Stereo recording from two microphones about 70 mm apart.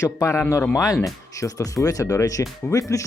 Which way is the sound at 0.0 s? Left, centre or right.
Left.